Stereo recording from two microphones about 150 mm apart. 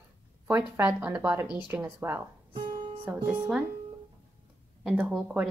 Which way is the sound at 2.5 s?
30° right (ahead or behind).